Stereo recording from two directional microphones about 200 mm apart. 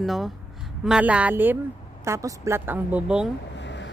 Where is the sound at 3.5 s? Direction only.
60° left (ahead or behind).